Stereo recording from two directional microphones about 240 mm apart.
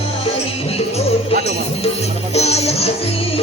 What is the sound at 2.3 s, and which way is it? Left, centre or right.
Music, left.